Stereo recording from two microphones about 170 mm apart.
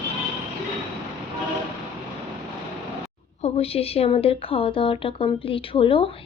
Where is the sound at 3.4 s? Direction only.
40° left (ahead or behind).